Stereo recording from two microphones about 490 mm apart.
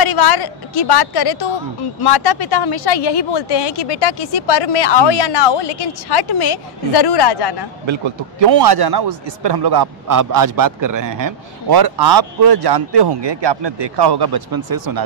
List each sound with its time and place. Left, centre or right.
0.0 s a woman's voice: left
7.8 s a man's voice: right
8.5 s a man's voice: right